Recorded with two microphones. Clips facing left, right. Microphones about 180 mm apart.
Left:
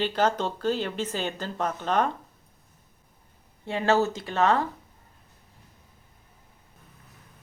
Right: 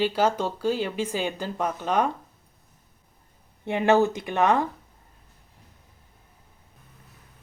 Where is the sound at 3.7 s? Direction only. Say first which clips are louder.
Right 3 dB; 20° right (ahead or behind).